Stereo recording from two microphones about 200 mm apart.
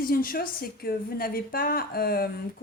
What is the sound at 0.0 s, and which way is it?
A woman's voice, 45° left (ahead or behind).